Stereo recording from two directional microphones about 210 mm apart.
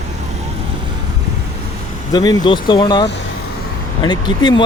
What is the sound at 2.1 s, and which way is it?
Speech, 20° left (ahead or behind).